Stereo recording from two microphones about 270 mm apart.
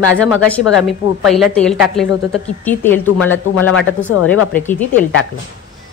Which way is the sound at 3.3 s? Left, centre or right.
Left.